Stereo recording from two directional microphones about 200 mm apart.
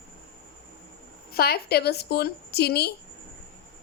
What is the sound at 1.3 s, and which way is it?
A woman's voice, 50° left (ahead or behind).